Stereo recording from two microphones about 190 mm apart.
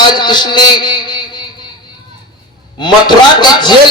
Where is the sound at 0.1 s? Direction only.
25° left (ahead or behind).